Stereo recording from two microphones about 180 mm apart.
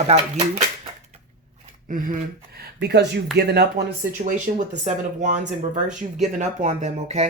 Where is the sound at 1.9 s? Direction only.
50° right (ahead or behind).